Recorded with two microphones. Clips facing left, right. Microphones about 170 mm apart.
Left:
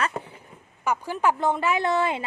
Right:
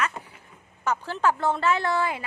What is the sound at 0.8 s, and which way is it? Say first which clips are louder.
Speech: left 1 dB; 10° left (ahead or behind).